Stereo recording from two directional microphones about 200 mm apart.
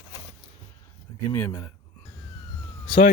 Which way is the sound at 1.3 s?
15° left (ahead or behind).